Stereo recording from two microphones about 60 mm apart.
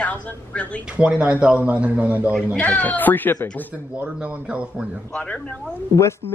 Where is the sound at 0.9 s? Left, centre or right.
Right.